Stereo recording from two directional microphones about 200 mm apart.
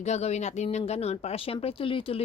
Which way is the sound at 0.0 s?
35° left (ahead or behind).